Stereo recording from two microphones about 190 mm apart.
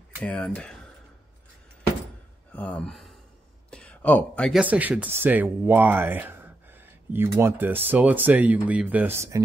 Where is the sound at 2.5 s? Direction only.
10° left (ahead or behind).